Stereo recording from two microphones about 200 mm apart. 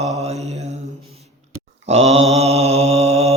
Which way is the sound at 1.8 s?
30° right (ahead or behind).